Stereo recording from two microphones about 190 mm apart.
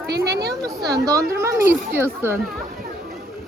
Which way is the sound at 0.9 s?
20° right (ahead or behind).